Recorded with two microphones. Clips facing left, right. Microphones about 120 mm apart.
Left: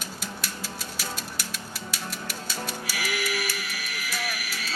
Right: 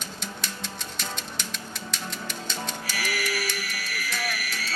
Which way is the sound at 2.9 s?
20° left (ahead or behind).